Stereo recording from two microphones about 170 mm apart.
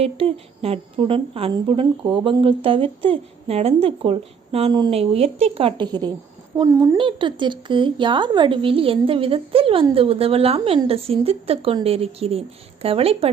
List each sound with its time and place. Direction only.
0.0 s a woman's voice: 35° right (ahead or behind); by 6.9 s 20° right (ahead or behind)
6.9 s a woman's voice: 30° right (ahead or behind)